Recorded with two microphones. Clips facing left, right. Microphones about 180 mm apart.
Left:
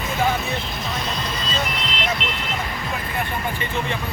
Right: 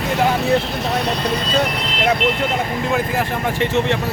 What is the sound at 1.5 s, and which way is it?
Speech, 55° right (ahead or behind).